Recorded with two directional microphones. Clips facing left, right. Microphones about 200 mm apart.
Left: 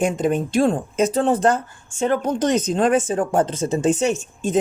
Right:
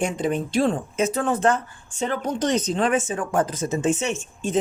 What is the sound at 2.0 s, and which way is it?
Speech, 50° left (ahead or behind).